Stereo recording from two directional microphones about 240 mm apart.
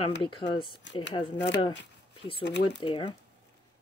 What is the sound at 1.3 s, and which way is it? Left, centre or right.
Speech, left.